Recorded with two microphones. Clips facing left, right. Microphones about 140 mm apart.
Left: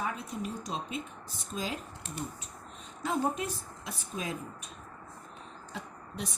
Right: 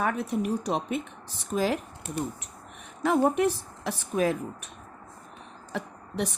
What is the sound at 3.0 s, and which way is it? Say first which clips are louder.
A woman's voice: right 9 dB; 70° right (ahead or behind).